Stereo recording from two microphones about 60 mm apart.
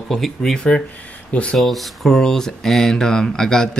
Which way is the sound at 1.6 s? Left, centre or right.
Centre.